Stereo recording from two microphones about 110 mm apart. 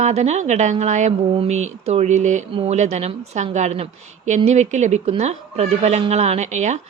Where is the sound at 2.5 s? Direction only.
70° right (ahead or behind).